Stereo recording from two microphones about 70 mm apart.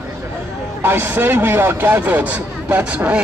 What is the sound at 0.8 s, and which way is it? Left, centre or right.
A man's voice, right.